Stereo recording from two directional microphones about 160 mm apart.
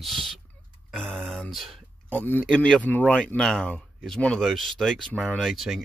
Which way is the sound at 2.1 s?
10° left (ahead or behind).